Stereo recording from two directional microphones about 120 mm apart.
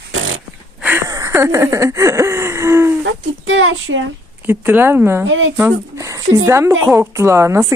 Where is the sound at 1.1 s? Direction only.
30° right (ahead or behind).